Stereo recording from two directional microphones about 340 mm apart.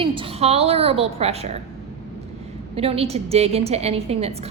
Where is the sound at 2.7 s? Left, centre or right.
Centre.